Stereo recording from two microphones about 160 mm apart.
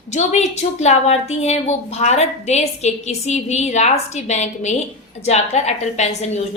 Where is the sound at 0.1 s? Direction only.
45° left (ahead or behind).